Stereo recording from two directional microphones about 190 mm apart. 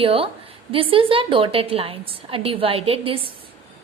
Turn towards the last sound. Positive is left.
turn(degrees=-30)  # may be behind; listen again after turning